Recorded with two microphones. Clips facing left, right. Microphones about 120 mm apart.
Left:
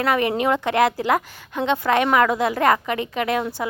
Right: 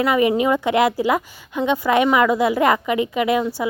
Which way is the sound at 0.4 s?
10° right (ahead or behind).